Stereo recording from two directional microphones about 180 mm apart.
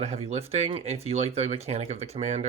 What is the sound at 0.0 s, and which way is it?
Speech, 35° right (ahead or behind).